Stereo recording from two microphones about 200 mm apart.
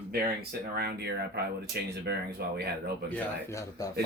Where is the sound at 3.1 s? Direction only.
15° left (ahead or behind).